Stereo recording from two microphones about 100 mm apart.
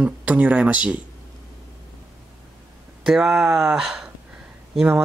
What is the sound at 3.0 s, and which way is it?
Speech, 5° right (ahead or behind).